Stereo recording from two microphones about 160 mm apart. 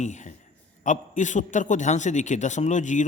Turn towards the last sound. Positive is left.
turn(degrees=50)  # may be behind; listen again after turning